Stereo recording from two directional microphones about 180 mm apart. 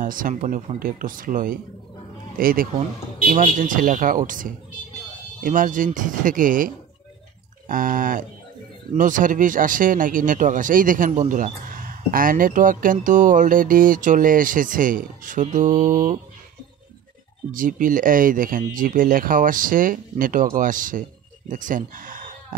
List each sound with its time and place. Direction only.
0.0 s speech: 50° right (ahead or behind)
17.5 s speech: 50° right (ahead or behind)